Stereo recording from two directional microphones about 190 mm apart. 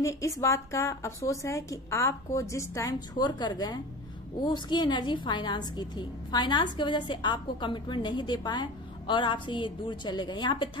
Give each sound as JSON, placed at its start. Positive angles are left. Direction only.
{"t": 0.0, "sound": "a woman's voice", "side_deg": 15}